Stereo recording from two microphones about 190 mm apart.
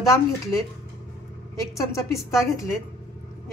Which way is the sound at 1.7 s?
15° left (ahead or behind).